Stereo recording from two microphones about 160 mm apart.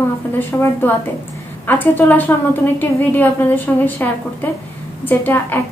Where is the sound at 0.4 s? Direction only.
15° left (ahead or behind).